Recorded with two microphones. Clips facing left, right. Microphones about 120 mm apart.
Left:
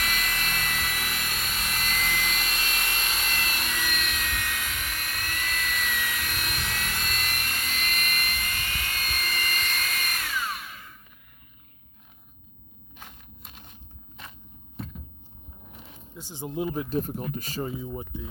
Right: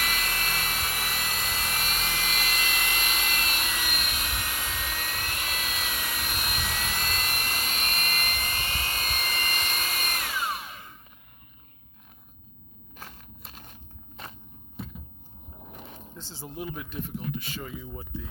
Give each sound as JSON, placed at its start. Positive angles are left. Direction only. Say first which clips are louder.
{"t": 0.0, "sound": "vehicle", "louder": "even", "side_deg": -30}
{"t": 0.7, "sound": "a sound", "louder": "even", "side_deg": -25}
{"t": 1.3, "sound": "vehicle", "louder": "right 1 dB", "side_deg": -15}
{"t": 4.9, "sound": "helicopter", "louder": "even", "side_deg": -30}
{"t": 5.9, "sound": "sawing", "louder": "left 2 dB", "side_deg": -20}
{"t": 7.0, "sound": "a sound", "louder": "right 1 dB", "side_deg": -35}
{"t": 7.4, "sound": "helicopter", "louder": "right 1 dB", "side_deg": -25}
{"t": 13.0, "sound": "crushing", "louder": "right 2 dB", "side_deg": -45}
{"t": 16.1, "sound": "speech", "louder": "left 7 dB", "side_deg": 15}